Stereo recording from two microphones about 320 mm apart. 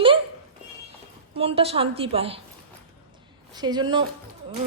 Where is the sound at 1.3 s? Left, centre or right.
Centre.